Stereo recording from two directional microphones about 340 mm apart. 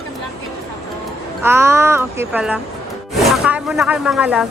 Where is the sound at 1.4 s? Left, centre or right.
Centre.